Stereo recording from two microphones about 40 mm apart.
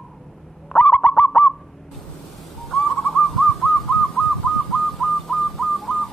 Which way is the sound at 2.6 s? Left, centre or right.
Centre.